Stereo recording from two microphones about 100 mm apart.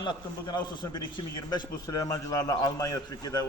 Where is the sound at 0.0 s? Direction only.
50° left (ahead or behind).